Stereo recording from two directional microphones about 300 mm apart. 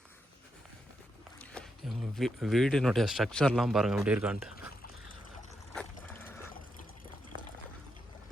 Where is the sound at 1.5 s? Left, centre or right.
Centre.